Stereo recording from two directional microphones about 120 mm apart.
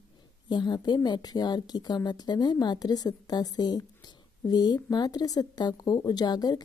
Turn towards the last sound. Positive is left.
turn(degrees=35)  # may be behind; listen again after turning